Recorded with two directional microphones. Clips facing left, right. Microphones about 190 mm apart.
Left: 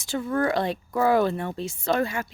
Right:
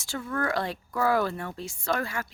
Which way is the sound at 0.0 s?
20° left (ahead or behind).